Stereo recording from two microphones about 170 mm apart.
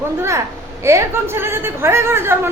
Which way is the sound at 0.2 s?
15° right (ahead or behind).